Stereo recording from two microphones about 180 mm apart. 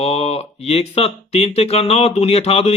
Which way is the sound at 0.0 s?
35° left (ahead or behind).